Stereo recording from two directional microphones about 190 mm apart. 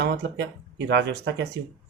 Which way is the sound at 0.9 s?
70° right (ahead or behind).